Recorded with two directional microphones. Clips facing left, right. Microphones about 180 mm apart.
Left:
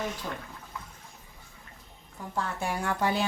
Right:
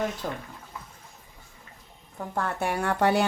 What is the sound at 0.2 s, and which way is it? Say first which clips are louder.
Speech: right 4 dB; 50° right (ahead or behind).